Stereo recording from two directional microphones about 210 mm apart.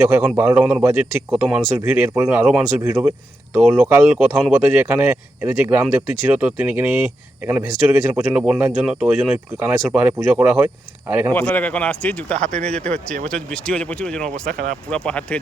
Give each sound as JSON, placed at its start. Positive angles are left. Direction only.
{"t": 0.1, "sound": "speech", "side_deg": -5}
{"t": 11.3, "sound": "speech", "side_deg": 5}
{"t": 14.5, "sound": "speech", "side_deg": -40}
{"t": 14.8, "sound": "speech", "side_deg": 5}